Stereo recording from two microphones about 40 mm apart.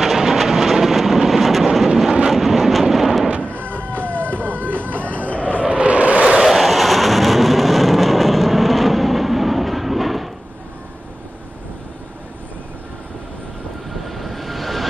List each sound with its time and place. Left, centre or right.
0.0 s vehicle: centre
3.5 s music: right
5.0 s a sound: left
5.6 s vehicle: right
6.4 s a sound: centre
14.0 s vehicle: centre